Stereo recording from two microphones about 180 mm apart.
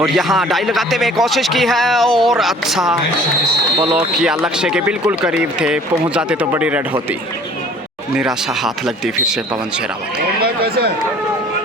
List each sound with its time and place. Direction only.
0.0 s speech: centre (ahead or behind)
8.1 s speech: 5° right (ahead or behind)
10.4 s a sound: 65° right (ahead or behind)